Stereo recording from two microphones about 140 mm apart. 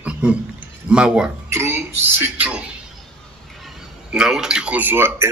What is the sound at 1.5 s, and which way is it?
Speech, 15° right (ahead or behind).